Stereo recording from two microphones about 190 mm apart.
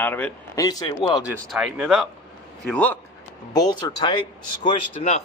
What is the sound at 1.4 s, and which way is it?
Speech, 5° right (ahead or behind).